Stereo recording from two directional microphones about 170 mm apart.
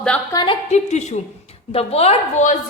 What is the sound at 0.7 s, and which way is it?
A woman's voice, 40° left (ahead or behind).